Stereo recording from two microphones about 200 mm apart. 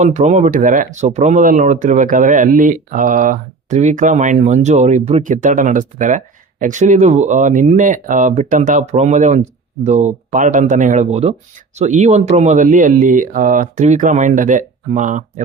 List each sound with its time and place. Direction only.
0.0 s speech: 35° right (ahead or behind)